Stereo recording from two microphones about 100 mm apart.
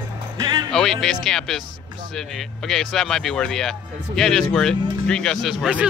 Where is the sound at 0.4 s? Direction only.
40° right (ahead or behind).